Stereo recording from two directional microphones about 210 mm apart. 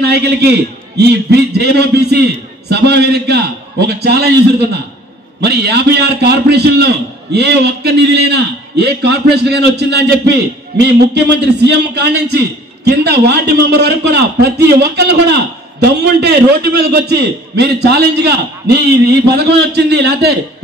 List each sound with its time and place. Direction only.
0.0 s a man's voice: 50° right (ahead or behind)
5.4 s a man's voice: 50° right (ahead or behind)